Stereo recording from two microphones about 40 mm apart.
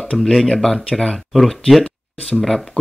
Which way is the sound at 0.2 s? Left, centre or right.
Centre.